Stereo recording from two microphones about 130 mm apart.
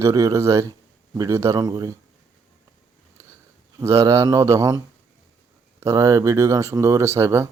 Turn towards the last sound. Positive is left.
turn(degrees=-20)  # may be behind; listen again after turning